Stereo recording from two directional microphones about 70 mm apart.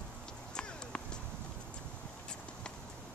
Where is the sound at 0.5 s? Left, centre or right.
Centre.